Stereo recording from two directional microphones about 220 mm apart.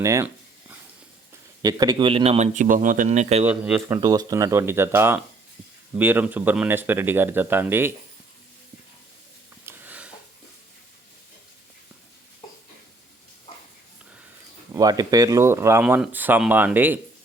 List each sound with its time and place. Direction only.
0.0 s speech: 15° right (ahead or behind)
1.6 s a man's voice: 20° right (ahead or behind)
3.4 s speech: 5° right (ahead or behind)
9.6 s sniff: 10° right (ahead or behind)
14.7 s speech: 15° right (ahead or behind)